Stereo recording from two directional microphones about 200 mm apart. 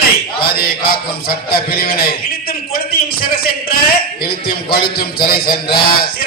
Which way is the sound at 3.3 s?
50° left (ahead or behind).